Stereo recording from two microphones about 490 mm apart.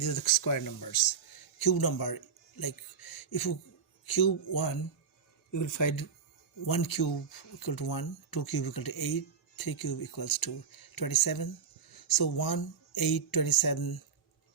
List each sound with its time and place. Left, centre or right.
0.4 s speech: left